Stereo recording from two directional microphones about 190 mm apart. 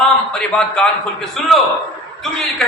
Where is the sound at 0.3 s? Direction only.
5° left (ahead or behind).